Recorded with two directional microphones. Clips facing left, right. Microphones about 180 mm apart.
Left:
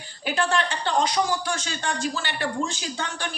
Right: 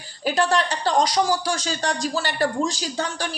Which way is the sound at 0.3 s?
40° right (ahead or behind).